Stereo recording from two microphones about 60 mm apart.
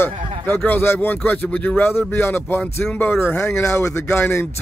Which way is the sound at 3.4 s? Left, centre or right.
Left.